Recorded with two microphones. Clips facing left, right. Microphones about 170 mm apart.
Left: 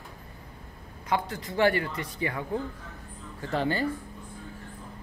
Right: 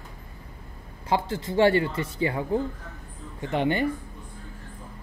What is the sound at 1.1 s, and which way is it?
Speech, 25° right (ahead or behind).